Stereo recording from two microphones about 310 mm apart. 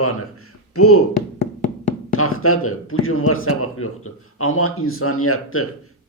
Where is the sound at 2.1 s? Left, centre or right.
Left.